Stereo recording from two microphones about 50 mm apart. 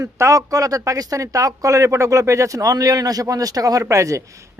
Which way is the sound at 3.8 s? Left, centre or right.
Right.